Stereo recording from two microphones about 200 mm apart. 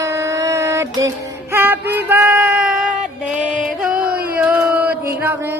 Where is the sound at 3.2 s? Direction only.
5° right (ahead or behind).